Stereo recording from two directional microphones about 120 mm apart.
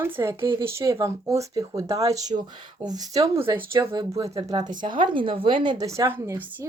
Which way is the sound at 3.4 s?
20° right (ahead or behind).